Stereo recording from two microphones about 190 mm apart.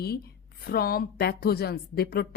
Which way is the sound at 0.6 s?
55° left (ahead or behind).